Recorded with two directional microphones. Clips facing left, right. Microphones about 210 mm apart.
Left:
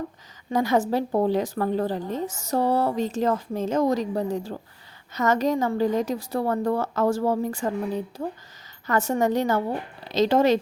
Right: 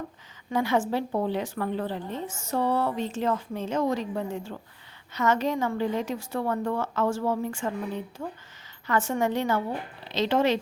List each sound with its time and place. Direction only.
0.5 s a woman's voice: 40° left (ahead or behind)